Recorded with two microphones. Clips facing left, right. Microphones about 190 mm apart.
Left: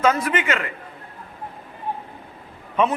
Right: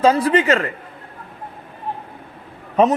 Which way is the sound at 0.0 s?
30° right (ahead or behind).